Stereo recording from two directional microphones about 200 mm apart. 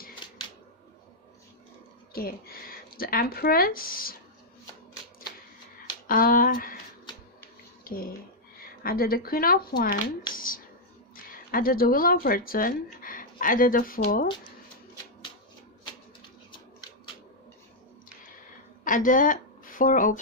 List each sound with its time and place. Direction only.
2.1 s speech: 50° left (ahead or behind)
6.1 s speech: 45° left (ahead or behind)
7.9 s speech: 50° left (ahead or behind)
18.9 s speech: 40° left (ahead or behind)